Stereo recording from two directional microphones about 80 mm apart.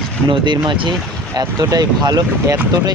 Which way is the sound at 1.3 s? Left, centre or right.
Right.